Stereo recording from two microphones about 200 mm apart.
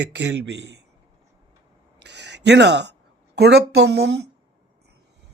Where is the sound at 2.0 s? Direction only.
60° right (ahead or behind).